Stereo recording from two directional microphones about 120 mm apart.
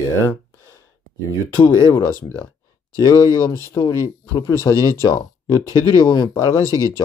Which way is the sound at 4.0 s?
30° left (ahead or behind).